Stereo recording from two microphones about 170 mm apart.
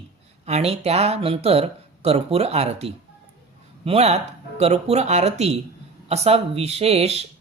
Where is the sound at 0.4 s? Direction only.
40° right (ahead or behind).